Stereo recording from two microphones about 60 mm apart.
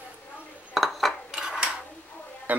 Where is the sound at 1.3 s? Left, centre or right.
Centre.